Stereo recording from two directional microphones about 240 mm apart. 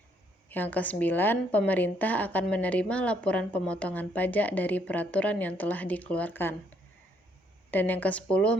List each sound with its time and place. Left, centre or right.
0.4 s a woman's voice: centre
7.7 s a woman's voice: centre